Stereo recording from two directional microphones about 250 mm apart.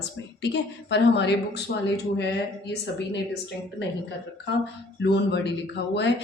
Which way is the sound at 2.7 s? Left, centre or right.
Left.